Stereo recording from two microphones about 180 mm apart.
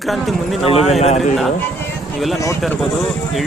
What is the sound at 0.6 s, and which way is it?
Speech, 35° left (ahead or behind).